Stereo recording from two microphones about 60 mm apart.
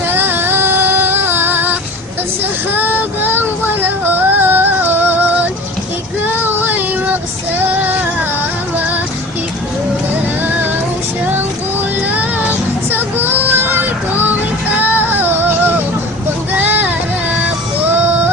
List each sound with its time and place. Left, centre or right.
0.1 s a sound: right
3.3 s music: right
6.2 s child singing: right
8.7 s music: right
10.4 s female singing: right
11.9 s music: right
12.9 s child singing: right
14.9 s music: right
16.5 s a sound: right